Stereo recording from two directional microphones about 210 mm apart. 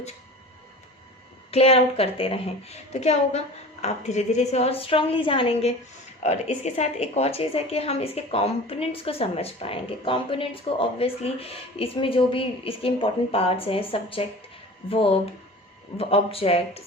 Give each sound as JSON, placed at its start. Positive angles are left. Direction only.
{"t": 1.5, "sound": "a woman's voice", "side_deg": 30}